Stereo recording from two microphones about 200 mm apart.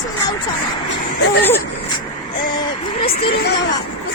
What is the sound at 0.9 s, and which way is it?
Speech, 60° left (ahead or behind).